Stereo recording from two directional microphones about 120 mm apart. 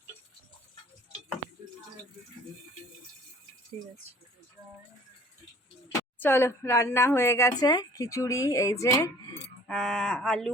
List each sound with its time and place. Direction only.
6.1 s speech: 20° left (ahead or behind)
9.6 s speech: 5° left (ahead or behind)